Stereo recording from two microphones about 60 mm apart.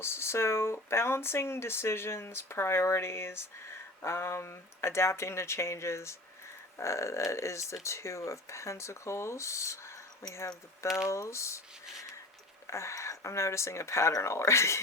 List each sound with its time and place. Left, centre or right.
0.0 s speech: left
10.8 s speech: centre
11.1 s speech: left
12.6 s speech: left